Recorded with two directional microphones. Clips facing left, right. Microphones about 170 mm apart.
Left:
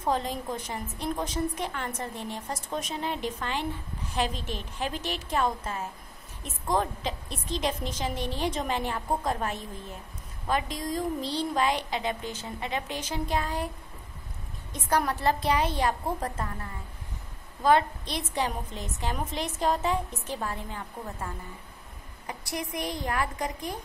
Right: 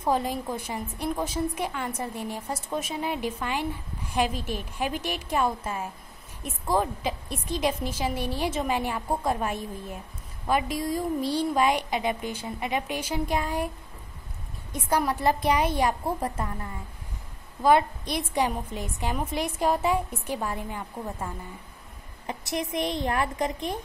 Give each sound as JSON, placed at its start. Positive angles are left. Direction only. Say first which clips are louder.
{"t": 0.0, "sound": "a woman's voice", "louder": "right 3 dB", "side_deg": -10}
{"t": 14.7, "sound": "a woman's voice", "louder": "right 1 dB", "side_deg": -10}
{"t": 17.6, "sound": "a woman's voice", "louder": "right 2 dB", "side_deg": -10}